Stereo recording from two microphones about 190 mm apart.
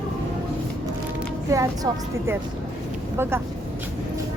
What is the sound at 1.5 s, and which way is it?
Speech, 15° right (ahead or behind).